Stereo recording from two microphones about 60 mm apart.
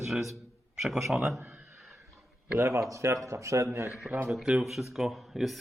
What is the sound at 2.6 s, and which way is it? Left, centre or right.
Speech, right.